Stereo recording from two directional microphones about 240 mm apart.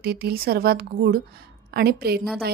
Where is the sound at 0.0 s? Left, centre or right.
Right.